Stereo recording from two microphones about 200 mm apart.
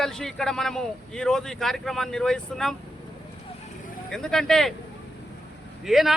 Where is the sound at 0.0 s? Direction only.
Centre (ahead or behind).